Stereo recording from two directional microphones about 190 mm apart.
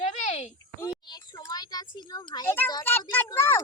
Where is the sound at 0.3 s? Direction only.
35° left (ahead or behind).